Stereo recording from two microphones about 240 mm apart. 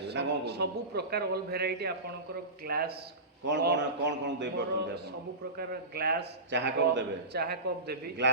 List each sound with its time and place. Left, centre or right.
0.0 s a man's voice: right